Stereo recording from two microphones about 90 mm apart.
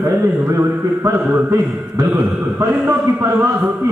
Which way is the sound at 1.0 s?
35° right (ahead or behind).